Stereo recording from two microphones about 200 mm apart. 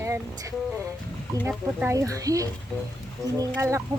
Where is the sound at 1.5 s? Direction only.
10° right (ahead or behind).